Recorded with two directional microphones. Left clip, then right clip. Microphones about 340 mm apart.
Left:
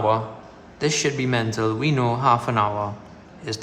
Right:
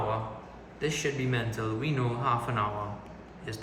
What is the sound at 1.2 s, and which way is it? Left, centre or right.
Speech, centre.